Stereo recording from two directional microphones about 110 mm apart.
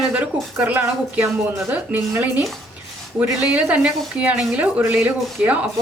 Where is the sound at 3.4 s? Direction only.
10° right (ahead or behind).